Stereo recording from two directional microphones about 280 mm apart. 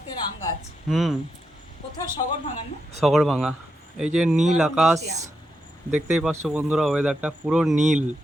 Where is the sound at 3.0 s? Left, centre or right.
Centre.